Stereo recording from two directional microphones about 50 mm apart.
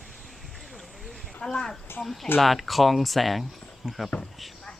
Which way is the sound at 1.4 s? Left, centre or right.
Centre.